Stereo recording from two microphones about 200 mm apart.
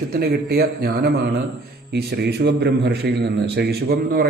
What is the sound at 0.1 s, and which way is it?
A man's voice, 50° right (ahead or behind).